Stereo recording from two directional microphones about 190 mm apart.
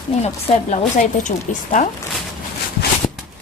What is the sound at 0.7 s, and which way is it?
Speech, 40° left (ahead or behind).